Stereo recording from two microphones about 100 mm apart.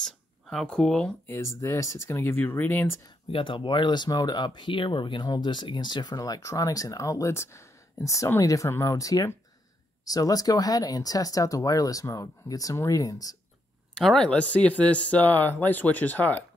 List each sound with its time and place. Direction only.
0.0 s speech: 5° left (ahead or behind)
1.2 s speech: 25° left (ahead or behind)
3.3 s speech: 60° left (ahead or behind); by 4.5 s 45° left (ahead or behind)
4.6 s speech: 55° left (ahead or behind); by 13.4 s 35° left (ahead or behind)
13.9 s speech: 5° left (ahead or behind)